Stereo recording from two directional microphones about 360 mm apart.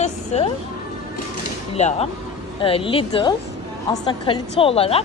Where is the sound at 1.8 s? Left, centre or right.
Centre.